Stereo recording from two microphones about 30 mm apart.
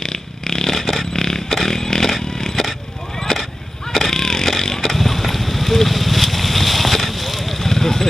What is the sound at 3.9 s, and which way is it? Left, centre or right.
Vehicle, centre.